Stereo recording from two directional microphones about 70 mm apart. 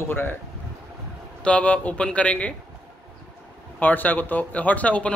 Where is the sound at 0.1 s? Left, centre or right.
Left.